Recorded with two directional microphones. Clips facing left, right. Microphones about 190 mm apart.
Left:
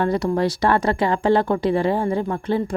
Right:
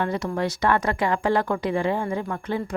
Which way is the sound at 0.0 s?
35° left (ahead or behind).